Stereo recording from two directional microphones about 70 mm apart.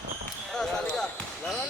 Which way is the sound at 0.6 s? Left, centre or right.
Centre.